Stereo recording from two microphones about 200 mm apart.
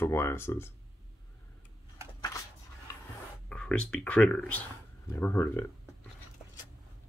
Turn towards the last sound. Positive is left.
turn(degrees=10)  # may be behind; listen again after turning